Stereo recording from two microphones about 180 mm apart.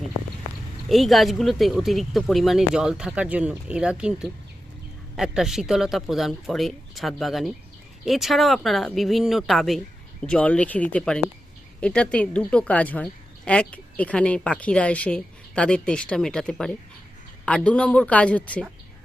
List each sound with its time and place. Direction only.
0.9 s a woman's voice: centre (ahead or behind)